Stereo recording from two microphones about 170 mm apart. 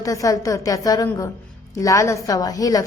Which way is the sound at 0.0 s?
20° left (ahead or behind).